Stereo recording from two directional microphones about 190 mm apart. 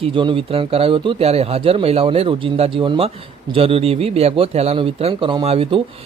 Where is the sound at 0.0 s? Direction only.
25° right (ahead or behind).